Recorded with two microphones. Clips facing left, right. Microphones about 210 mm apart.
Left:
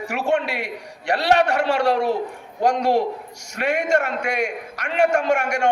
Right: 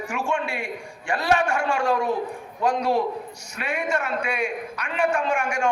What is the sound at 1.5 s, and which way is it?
Speech, 75° left (ahead or behind).